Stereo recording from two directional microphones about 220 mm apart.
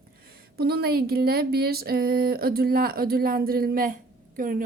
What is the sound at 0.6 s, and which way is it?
Speech, 45° right (ahead or behind).